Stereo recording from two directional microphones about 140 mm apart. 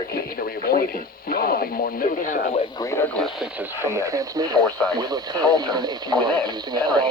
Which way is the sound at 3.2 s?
Centre (ahead or behind).